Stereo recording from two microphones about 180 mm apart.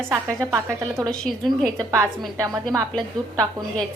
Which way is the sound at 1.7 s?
15° right (ahead or behind).